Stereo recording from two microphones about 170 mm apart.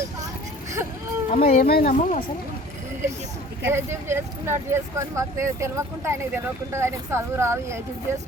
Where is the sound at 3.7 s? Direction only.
15° right (ahead or behind).